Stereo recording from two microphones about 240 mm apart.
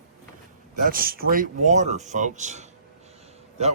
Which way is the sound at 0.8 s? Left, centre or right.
Right.